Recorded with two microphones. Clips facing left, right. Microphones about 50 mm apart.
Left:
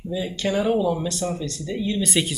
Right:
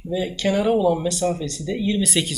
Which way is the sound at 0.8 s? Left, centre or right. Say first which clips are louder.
Right 3 dB; centre.